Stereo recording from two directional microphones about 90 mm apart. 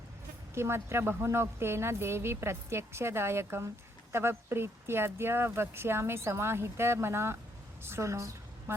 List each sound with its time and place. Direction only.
0.5 s a woman's voice: 30° right (ahead or behind)